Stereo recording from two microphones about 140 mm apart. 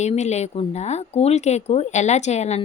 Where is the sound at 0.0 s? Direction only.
55° left (ahead or behind).